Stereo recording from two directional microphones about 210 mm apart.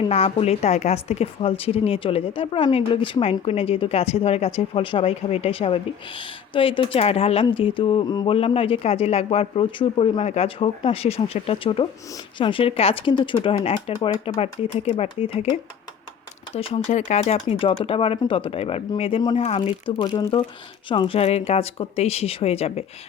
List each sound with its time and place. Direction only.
0.0 s speech: 30° left (ahead or behind)
16.6 s speech: 25° left (ahead or behind)